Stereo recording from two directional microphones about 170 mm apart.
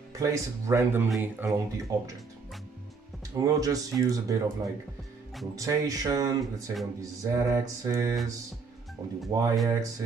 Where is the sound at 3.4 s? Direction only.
20° right (ahead or behind).